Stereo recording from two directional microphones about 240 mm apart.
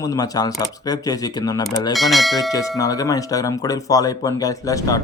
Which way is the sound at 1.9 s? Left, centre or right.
Centre.